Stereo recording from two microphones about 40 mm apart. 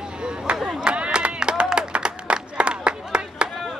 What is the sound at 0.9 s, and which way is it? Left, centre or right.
Clapping, right.